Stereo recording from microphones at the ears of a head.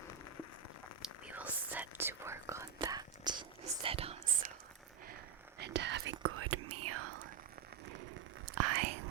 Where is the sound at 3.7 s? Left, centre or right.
Right.